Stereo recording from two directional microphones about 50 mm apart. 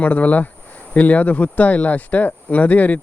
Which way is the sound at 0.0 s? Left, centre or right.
Left.